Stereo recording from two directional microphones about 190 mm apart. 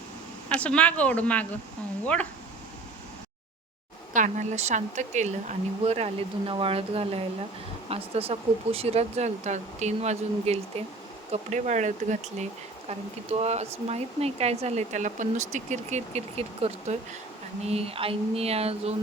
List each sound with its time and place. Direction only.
0.4 s speech: 5° left (ahead or behind)
4.1 s speech: 40° right (ahead or behind)